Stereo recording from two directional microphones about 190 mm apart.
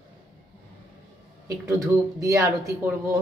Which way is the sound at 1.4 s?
15° right (ahead or behind).